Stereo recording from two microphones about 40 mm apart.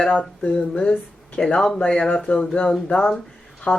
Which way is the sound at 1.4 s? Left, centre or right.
Centre.